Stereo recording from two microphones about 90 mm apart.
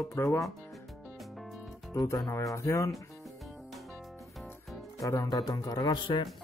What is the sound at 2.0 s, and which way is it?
Speech, 35° left (ahead or behind).